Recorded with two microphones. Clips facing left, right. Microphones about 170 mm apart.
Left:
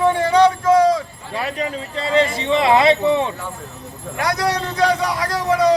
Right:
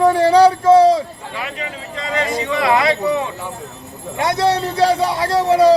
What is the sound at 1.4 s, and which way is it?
Speech, 35° left (ahead or behind).